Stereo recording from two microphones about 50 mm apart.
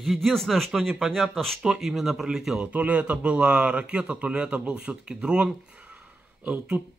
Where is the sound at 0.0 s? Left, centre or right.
Centre.